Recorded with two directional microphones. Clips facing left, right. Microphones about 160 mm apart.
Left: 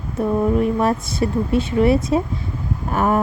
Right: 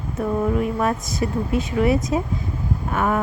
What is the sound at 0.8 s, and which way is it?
Speech, 30° left (ahead or behind).